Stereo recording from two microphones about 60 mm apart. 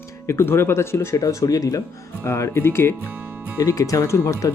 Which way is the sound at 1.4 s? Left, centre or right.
Left.